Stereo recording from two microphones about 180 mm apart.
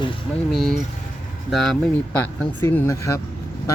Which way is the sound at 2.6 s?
15° left (ahead or behind).